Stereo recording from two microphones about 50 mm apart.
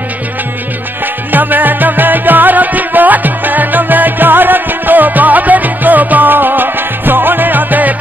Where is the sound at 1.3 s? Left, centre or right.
Right.